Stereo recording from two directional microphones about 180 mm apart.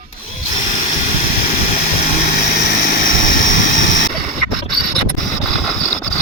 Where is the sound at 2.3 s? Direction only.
60° left (ahead or behind).